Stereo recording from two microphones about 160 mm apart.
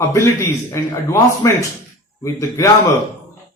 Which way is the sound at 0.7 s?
15° left (ahead or behind).